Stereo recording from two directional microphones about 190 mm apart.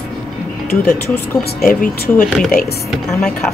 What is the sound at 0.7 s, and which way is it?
Speech, 50° left (ahead or behind).